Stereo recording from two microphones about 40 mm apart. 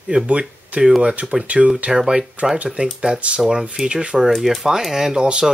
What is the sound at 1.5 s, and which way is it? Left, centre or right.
Speech, right.